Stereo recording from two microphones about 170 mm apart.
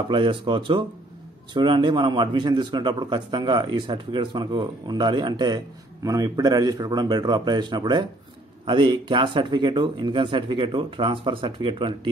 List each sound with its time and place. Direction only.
0.1 s a man's voice: 30° right (ahead or behind)